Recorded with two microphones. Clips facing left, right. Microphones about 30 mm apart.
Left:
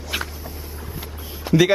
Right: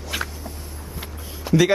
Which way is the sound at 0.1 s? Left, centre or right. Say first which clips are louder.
Left 1 dB; centre.